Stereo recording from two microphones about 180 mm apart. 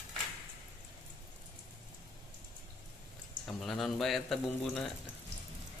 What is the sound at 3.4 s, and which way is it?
Speech, centre (ahead or behind).